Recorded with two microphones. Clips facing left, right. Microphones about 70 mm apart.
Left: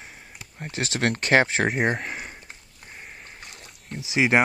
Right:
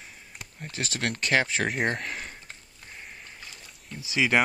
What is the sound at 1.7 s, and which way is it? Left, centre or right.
Speech, centre.